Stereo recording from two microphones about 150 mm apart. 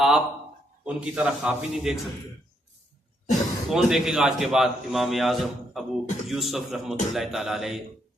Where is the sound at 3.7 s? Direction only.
5° right (ahead or behind).